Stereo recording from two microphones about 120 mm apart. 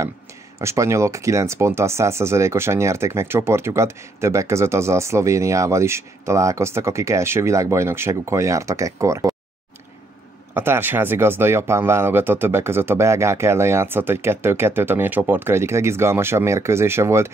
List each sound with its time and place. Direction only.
0.6 s speech: 25° right (ahead or behind)
10.5 s speech: 20° right (ahead or behind)